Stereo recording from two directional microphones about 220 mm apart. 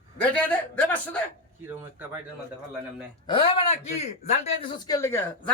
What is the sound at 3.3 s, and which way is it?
A man's voice, 25° left (ahead or behind).